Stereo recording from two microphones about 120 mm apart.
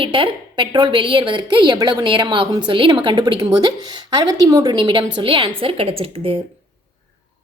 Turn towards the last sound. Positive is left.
turn(degrees=-50)  # may be behind; listen again after turning